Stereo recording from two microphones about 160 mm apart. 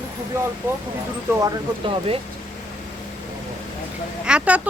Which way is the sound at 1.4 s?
35° right (ahead or behind).